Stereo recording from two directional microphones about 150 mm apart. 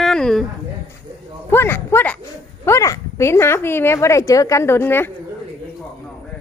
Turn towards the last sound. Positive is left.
turn(degrees=15)  # may be behind; listen again after turning